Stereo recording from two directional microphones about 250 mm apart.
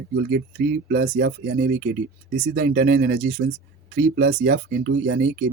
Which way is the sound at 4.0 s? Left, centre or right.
Right.